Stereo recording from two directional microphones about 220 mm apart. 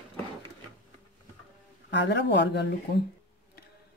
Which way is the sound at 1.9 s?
50° left (ahead or behind).